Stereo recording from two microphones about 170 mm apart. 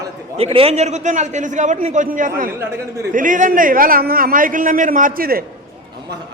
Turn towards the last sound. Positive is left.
turn(degrees=-60)  # may be behind; listen again after turning